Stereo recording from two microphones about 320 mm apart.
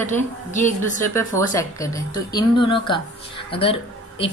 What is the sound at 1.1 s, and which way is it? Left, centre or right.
Speech, centre.